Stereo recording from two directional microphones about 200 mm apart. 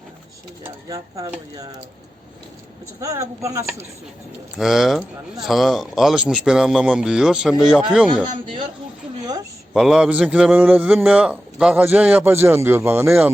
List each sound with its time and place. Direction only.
0.6 s speech: 15° right (ahead or behind)
3.0 s speech: 15° right (ahead or behind)
4.5 s speech: centre (ahead or behind)
9.2 s a sound: 20° right (ahead or behind)
9.7 s speech: centre (ahead or behind)